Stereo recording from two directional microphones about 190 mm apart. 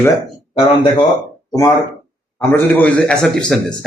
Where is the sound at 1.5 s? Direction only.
15° left (ahead or behind).